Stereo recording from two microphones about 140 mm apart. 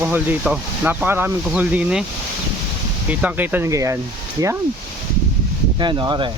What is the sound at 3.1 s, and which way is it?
Speech, 10° right (ahead or behind).